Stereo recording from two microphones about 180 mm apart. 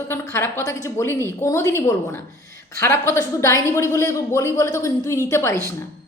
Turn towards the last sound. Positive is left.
turn(degrees=15)  # may be behind; listen again after turning